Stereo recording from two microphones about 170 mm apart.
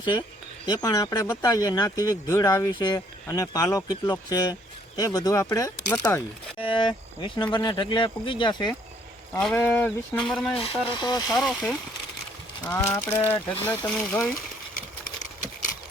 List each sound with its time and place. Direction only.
0.0 s speech: 25° left (ahead or behind)
6.6 s speech: 30° left (ahead or behind)
9.6 s speech: 10° left (ahead or behind)
10.9 s speech: 25° left (ahead or behind)
11.3 s speech: centre (ahead or behind)
12.6 s speech: 15° left (ahead or behind)